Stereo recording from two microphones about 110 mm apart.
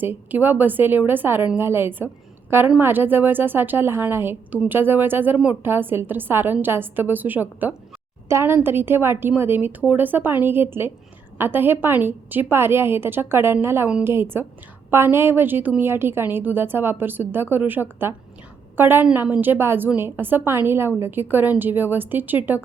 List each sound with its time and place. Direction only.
0.0 s a woman's voice: 15° right (ahead or behind)